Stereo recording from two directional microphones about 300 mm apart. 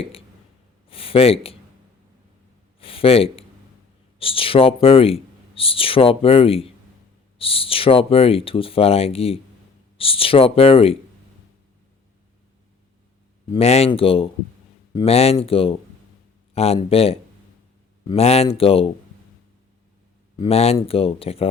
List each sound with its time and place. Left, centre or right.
0.9 s speech: centre
2.8 s speech: centre
13.5 s speech: left
20.4 s speech: centre